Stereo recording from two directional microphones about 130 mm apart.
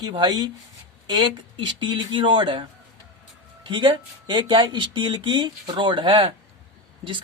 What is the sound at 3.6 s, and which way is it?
Speech, 40° right (ahead or behind).